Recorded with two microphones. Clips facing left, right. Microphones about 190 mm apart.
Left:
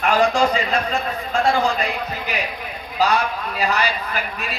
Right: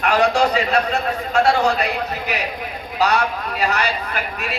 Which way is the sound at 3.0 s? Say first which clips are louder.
Right 1 dB; 70° right (ahead or behind).